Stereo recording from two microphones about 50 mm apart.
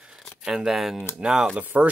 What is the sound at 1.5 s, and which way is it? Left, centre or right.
Speech, right.